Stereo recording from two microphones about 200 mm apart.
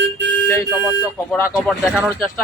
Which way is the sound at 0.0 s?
60° right (ahead or behind).